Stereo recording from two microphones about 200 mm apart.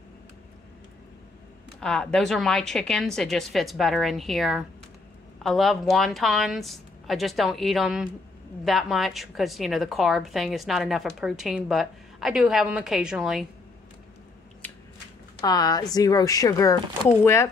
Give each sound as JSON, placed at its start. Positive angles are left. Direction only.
{"t": 1.8, "sound": "a woman's voice", "side_deg": 5}
{"t": 15.4, "sound": "speech", "side_deg": 20}